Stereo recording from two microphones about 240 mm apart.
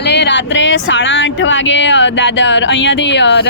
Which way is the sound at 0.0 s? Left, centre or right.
Left.